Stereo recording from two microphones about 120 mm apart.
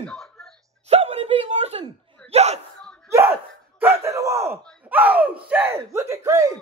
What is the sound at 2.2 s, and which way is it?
Speech, 65° right (ahead or behind).